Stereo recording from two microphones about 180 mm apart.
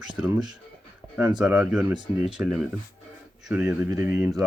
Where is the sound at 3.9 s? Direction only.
15° right (ahead or behind).